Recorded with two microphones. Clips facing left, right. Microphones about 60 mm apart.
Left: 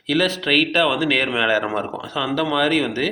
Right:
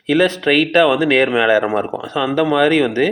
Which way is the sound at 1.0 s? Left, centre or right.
Right.